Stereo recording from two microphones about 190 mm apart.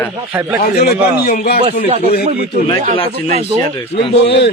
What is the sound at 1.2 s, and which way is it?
Speech, 55° left (ahead or behind).